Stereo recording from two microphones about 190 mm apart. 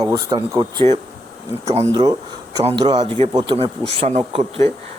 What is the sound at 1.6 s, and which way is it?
Speech, 35° right (ahead or behind).